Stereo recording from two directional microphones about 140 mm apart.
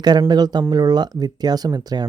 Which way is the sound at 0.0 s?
30° right (ahead or behind).